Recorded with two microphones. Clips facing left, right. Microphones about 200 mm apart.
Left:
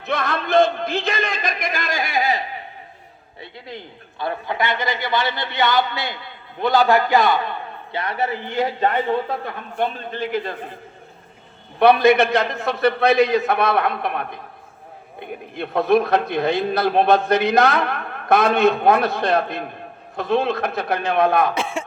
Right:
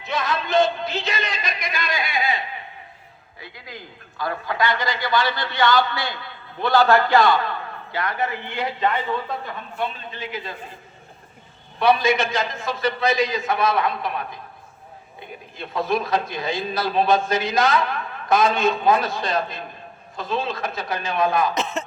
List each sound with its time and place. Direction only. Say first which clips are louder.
0.0 s a man's voice: left 2 dB; 55° left (ahead or behind)
3.4 s a man's voice: left 4 dB; 30° left (ahead or behind); by 10.8 s 55° left (ahead or behind)
11.8 s speech: left 5 dB; 60° left (ahead or behind)
21.5 s speech: left 1 dB; 10° left (ahead or behind)